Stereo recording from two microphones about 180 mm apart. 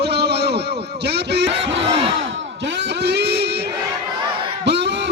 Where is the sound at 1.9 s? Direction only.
30° right (ahead or behind).